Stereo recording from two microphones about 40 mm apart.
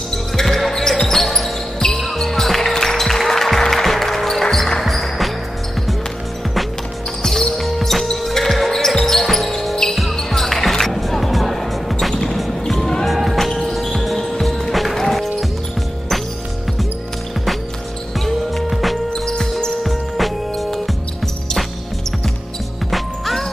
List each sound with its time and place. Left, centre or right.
0.4 s basketball bounce: centre
2.7 s music: centre
4.8 s music: centre
7.6 s basketball bounce: centre
12.3 s music: centre
13.0 s music: centre
13.7 s basketball bounce: centre
14.5 s music: centre
18.7 s music: centre
19.1 s music: centre
19.8 s music: centre
22.8 s music: centre